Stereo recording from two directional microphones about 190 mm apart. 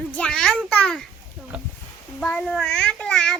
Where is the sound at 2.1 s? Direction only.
5° left (ahead or behind).